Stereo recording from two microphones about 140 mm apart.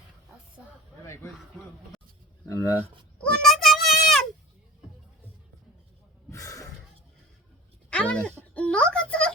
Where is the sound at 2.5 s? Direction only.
20° left (ahead or behind).